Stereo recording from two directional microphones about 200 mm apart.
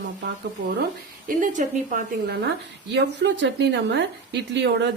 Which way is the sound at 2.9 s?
60° right (ahead or behind).